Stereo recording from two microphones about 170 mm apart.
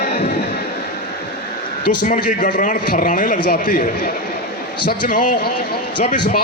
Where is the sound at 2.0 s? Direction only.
50° left (ahead or behind).